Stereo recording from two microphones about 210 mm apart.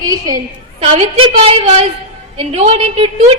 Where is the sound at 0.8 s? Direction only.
25° right (ahead or behind).